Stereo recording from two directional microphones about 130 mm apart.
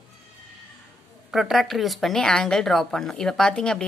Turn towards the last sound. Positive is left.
turn(degrees=5)  # may be behind; listen again after turning